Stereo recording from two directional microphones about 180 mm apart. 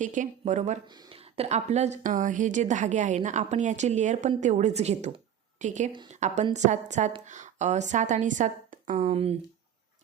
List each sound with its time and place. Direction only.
0.0 s speech: 45° right (ahead or behind)
0.9 s a woman's voice: 25° right (ahead or behind); by 9.0 s 45° right (ahead or behind)
9.0 s a woman's voice: 35° right (ahead or behind)